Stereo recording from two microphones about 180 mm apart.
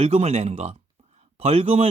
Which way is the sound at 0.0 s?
35° right (ahead or behind).